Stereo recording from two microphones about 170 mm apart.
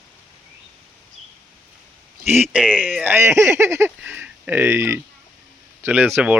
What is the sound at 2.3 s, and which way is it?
Speech, 10° right (ahead or behind).